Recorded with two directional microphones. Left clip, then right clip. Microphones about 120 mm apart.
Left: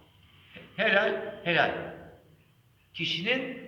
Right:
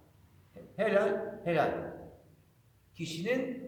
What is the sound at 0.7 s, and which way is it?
Speech, 30° right (ahead or behind).